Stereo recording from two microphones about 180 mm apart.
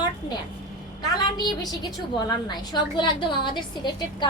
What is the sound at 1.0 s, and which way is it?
A woman's voice, 20° left (ahead or behind).